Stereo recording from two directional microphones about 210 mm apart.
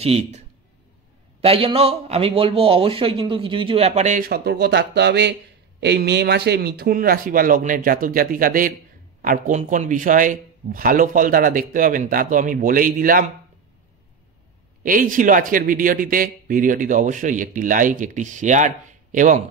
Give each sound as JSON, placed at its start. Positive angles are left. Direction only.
{"t": 0.0, "sound": "a man's voice", "side_deg": -30}
{"t": 14.8, "sound": "a man's voice", "side_deg": -40}